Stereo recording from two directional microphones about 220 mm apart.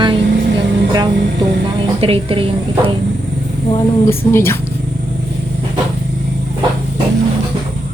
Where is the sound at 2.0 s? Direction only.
25° right (ahead or behind).